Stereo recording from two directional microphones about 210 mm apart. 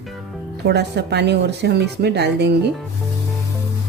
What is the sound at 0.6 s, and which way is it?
Speech, 50° right (ahead or behind).